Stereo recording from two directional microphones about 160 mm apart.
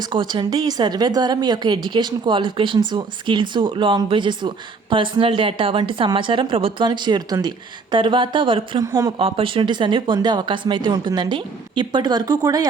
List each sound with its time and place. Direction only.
0.1 s a woman's voice: 30° right (ahead or behind)
8.8 s a woman's voice: 20° right (ahead or behind)
9.1 s a woman's voice: 35° right (ahead or behind)